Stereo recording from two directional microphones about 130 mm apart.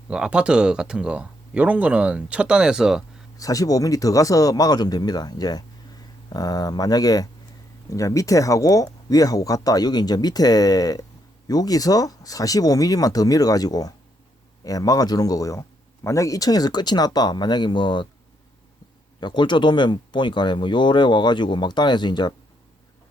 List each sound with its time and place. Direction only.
0.1 s speech: 5° right (ahead or behind)
3.3 s speech: 25° left (ahead or behind)
19.2 s speech: 35° left (ahead or behind)